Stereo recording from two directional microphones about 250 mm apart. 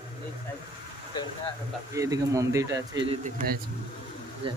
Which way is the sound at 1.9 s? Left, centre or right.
Centre.